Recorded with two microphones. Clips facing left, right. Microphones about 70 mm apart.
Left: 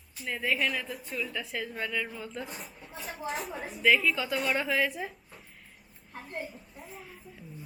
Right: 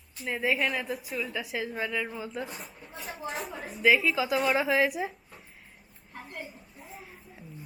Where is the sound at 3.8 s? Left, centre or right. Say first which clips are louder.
Right 2 dB; centre.